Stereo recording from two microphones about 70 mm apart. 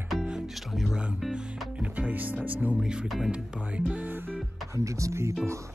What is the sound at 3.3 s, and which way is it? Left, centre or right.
Music, right.